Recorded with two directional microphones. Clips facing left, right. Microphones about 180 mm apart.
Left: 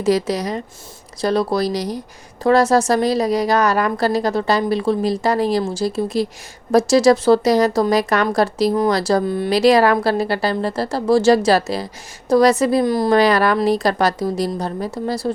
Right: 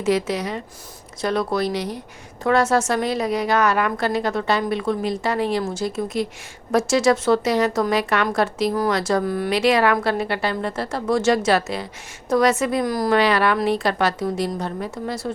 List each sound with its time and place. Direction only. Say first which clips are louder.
0.0 s a woman's voice: left 3 dB; 35° left (ahead or behind)
13.1 s a woman's voice: left 3 dB; 40° left (ahead or behind)